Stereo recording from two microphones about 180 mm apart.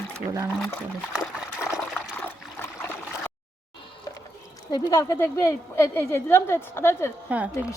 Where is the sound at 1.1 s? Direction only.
5° right (ahead or behind).